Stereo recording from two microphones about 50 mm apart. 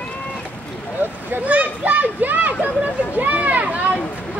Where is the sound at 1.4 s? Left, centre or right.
Right.